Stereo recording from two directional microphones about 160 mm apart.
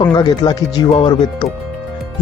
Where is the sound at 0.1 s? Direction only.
25° left (ahead or behind).